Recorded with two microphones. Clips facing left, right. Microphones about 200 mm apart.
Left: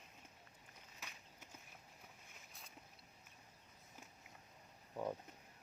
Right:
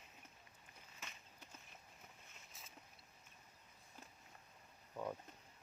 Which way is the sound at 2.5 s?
Centre (ahead or behind).